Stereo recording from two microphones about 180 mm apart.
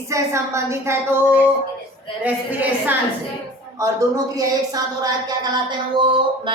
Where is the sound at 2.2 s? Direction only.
10° right (ahead or behind).